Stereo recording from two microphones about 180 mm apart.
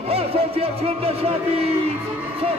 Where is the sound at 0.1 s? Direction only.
35° right (ahead or behind).